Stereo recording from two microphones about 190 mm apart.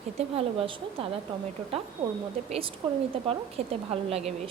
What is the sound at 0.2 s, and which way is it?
Speech, 30° right (ahead or behind).